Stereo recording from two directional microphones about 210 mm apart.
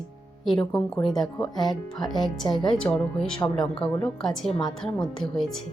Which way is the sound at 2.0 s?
Centre (ahead or behind).